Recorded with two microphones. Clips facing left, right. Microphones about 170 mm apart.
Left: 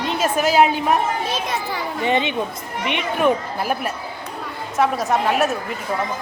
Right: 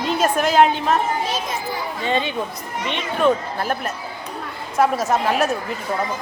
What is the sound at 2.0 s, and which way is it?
A woman's voice, 20° left (ahead or behind).